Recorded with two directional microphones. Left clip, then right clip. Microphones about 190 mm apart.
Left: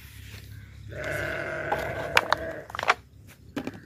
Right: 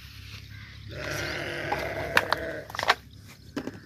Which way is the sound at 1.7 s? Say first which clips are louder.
Even; 5° left (ahead or behind).